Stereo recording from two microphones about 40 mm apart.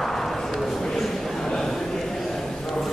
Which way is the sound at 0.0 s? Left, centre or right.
Centre.